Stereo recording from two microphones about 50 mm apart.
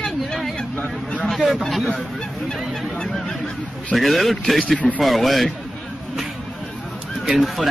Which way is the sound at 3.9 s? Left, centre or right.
Centre.